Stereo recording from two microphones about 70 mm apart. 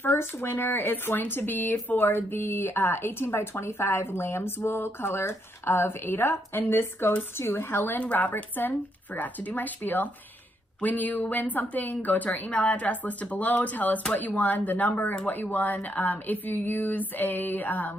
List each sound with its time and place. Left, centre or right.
0.0 s a woman's voice: left